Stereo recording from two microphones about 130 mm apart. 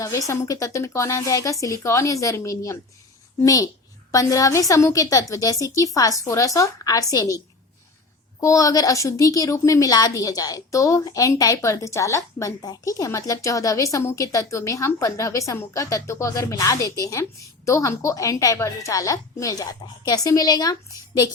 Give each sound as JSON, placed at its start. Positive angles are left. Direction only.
{"t": 0.0, "sound": "a woman's voice", "side_deg": 25}